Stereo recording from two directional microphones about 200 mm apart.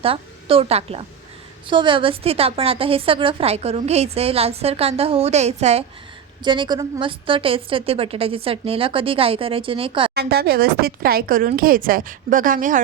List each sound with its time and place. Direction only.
0.0 s a woman's voice: 30° right (ahead or behind)
10.2 s a woman's voice: 55° right (ahead or behind)